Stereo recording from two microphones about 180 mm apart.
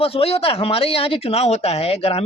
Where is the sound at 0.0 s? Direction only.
35° left (ahead or behind).